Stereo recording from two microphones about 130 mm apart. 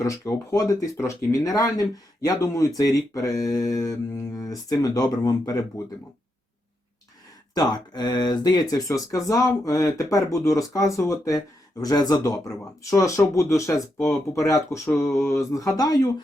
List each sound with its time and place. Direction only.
0.0 s speech: 25° left (ahead or behind)
7.5 s speech: 30° left (ahead or behind)